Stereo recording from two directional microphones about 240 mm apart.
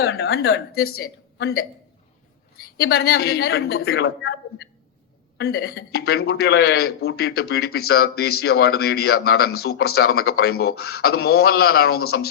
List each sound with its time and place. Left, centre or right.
0.0 s speech: left